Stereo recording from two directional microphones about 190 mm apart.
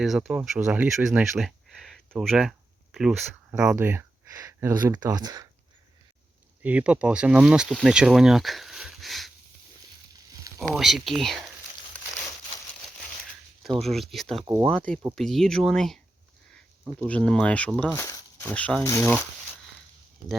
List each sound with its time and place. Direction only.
0.0 s speech: centre (ahead or behind); by 5.5 s 20° right (ahead or behind)
6.6 s speech: 5° right (ahead or behind)
10.6 s speech: centre (ahead or behind)
13.8 s speech: centre (ahead or behind)
14.4 s speech: 15° right (ahead or behind)
14.7 s speech: 5° left (ahead or behind)
17.1 s speech: 5° left (ahead or behind)